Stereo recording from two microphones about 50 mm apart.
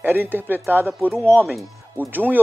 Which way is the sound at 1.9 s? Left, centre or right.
Right.